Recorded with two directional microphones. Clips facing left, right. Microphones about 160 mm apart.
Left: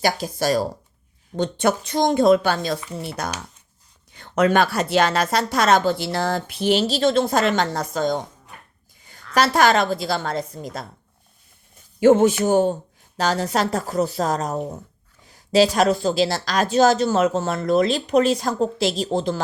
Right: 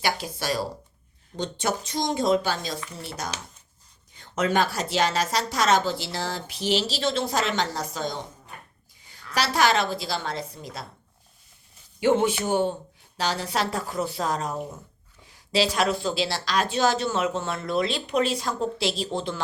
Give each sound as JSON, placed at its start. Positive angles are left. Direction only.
{"t": 0.0, "sound": "speech", "side_deg": 40}
{"t": 1.4, "sound": "a woman's voice", "side_deg": 55}
{"t": 11.9, "sound": "speech", "side_deg": 45}